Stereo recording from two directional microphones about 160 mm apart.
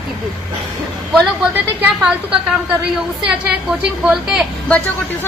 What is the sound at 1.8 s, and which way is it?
Speech, 10° right (ahead or behind).